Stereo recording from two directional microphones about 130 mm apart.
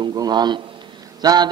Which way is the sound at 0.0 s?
35° right (ahead or behind).